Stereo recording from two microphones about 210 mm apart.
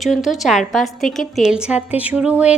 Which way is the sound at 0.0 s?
Centre (ahead or behind).